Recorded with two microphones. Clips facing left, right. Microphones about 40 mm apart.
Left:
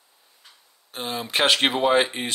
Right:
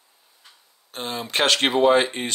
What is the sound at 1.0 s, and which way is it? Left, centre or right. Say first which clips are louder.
Speech: even; centre.